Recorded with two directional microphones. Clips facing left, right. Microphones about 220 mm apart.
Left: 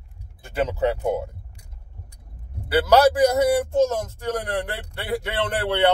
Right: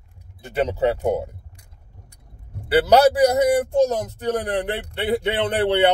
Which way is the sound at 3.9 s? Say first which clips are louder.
Right 3 dB; 20° right (ahead or behind).